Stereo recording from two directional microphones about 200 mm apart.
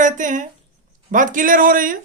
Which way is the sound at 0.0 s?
40° right (ahead or behind).